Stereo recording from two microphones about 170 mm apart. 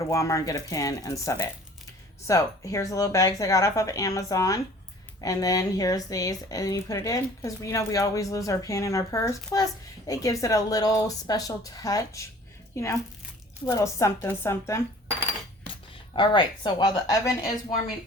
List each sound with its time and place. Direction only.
0.0 s a woman's voice: 20° left (ahead or behind)
16.1 s speech: 30° left (ahead or behind)